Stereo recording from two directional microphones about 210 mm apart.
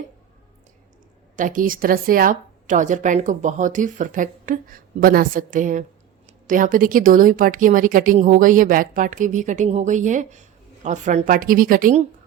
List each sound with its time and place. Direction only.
1.4 s speech: 40° right (ahead or behind)